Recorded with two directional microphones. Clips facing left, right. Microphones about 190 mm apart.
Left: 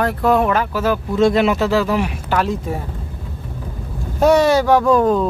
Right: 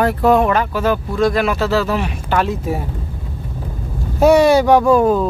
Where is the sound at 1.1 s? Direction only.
25° left (ahead or behind).